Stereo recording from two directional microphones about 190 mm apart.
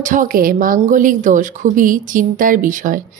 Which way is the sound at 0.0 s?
45° right (ahead or behind).